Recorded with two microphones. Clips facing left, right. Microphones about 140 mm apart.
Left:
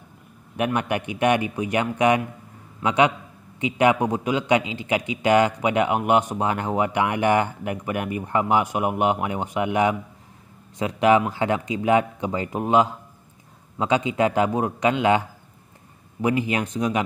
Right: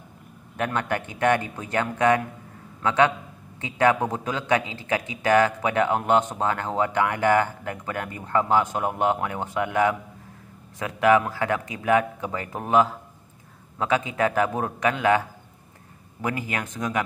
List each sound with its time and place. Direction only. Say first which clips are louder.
0.6 s a man's voice: left 3 dB; 15° left (ahead or behind)